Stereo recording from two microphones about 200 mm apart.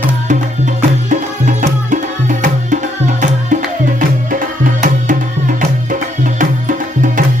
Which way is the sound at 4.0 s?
40° right (ahead or behind).